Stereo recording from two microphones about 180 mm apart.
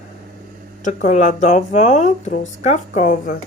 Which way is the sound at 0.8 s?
45° left (ahead or behind).